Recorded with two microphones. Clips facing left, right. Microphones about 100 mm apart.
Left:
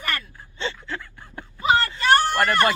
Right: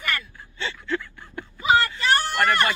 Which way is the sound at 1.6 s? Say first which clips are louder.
Even; 40° left (ahead or behind).